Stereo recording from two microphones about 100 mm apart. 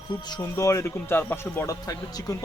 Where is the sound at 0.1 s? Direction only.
40° left (ahead or behind); by 1.6 s 20° left (ahead or behind).